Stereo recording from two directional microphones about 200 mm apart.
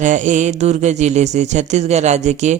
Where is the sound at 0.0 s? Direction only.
35° right (ahead or behind).